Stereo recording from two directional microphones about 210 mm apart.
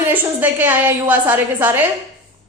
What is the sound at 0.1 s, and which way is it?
A woman's voice, 10° right (ahead or behind).